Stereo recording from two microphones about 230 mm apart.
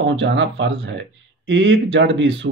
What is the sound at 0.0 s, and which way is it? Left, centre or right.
Speech, right.